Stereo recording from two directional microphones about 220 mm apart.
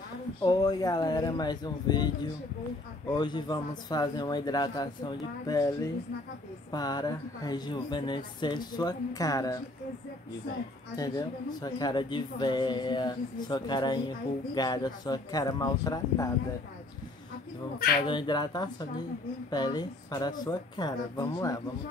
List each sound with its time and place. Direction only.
0.4 s speech: 20° left (ahead or behind)
3.1 s speech: 20° left (ahead or behind)
11.0 s speech: 15° left (ahead or behind)
18.0 s speech: 20° left (ahead or behind)